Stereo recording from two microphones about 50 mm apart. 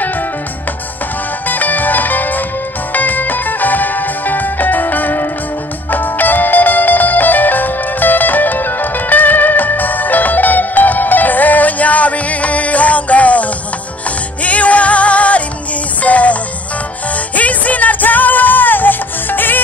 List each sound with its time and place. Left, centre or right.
1.5 s music: left
17.4 s music: left